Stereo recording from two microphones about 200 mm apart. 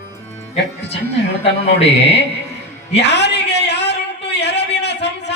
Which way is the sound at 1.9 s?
60° left (ahead or behind).